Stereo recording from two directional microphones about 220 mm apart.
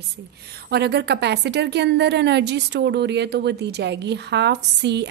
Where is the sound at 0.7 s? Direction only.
50° right (ahead or behind).